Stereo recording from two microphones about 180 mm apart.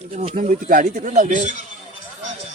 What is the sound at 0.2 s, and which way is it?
Speech, 30° right (ahead or behind).